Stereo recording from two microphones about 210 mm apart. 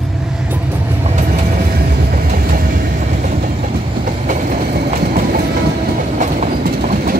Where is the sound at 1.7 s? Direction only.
45° right (ahead or behind).